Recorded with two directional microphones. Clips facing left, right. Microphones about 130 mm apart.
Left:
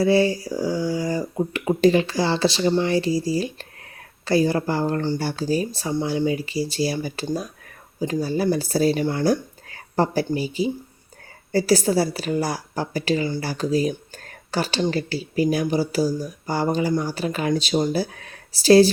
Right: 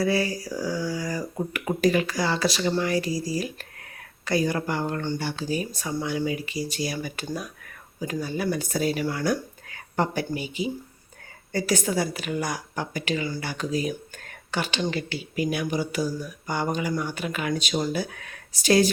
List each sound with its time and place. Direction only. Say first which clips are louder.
0.0 s a woman's voice: left 6 dB; 25° left (ahead or behind)